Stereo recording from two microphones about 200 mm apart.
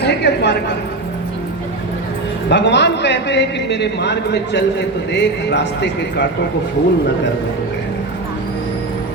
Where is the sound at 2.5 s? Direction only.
60° left (ahead or behind).